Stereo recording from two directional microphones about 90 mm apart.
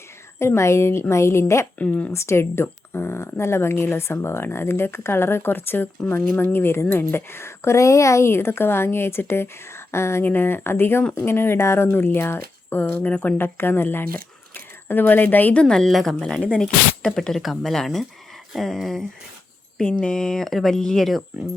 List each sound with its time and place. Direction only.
0.3 s a woman's voice: 30° left (ahead or behind)
1.8 s speech: 15° left (ahead or behind)
2.1 s speech: 30° left (ahead or behind)
15.6 s speech: 5° left (ahead or behind)